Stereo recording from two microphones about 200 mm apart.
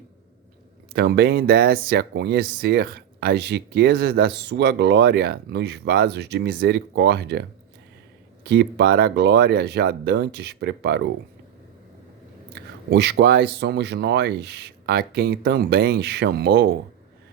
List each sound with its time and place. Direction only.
0.9 s speech: 55° right (ahead or behind)
8.4 s speech: 55° right (ahead or behind)
12.9 s speech: 60° right (ahead or behind)